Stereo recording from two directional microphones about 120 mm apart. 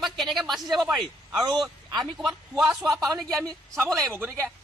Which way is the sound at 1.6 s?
35° right (ahead or behind).